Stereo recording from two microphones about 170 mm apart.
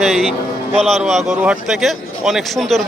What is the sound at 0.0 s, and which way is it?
A man's voice, centre (ahead or behind).